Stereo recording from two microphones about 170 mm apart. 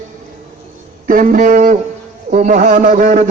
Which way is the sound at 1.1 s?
50° right (ahead or behind).